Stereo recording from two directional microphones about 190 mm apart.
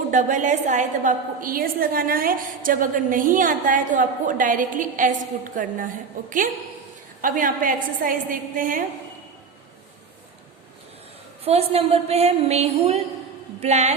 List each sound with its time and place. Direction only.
0.1 s a woman's voice: 40° right (ahead or behind)
7.2 s a woman's voice: 45° right (ahead or behind)
11.4 s a woman's voice: 30° right (ahead or behind)